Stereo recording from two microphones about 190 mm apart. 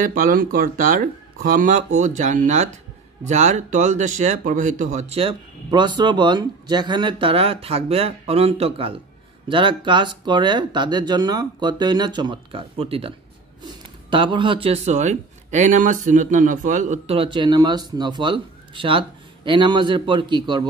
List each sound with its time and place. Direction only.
0.0 s a man's voice: 45° right (ahead or behind); by 13.1 s 30° right (ahead or behind)
14.1 s a man's voice: 25° right (ahead or behind)